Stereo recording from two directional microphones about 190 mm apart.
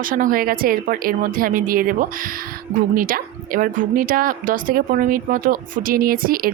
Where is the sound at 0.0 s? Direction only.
45° right (ahead or behind).